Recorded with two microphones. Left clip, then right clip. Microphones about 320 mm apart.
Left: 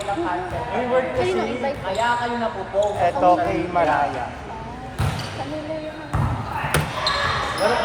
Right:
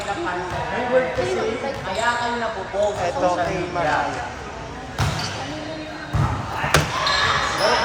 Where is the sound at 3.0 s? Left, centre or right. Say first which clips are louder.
Left 4 dB; left.